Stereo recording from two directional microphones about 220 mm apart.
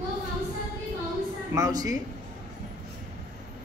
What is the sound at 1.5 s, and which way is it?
Speech, 15° right (ahead or behind).